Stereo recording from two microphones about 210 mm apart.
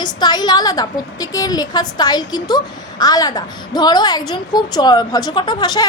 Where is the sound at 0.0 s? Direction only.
20° left (ahead or behind).